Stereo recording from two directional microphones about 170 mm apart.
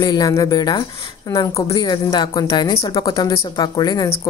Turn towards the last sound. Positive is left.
turn(degrees=25)  # may be behind; listen again after turning